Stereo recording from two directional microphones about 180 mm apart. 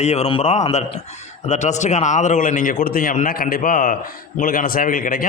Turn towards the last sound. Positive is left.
turn(degrees=50)  # may be behind; listen again after turning